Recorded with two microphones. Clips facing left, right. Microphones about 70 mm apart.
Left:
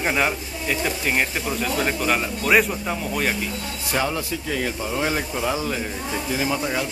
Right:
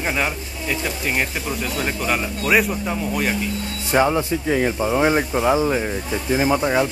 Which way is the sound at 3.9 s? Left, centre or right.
Right.